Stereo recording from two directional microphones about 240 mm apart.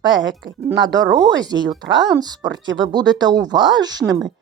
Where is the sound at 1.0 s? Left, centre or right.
Centre.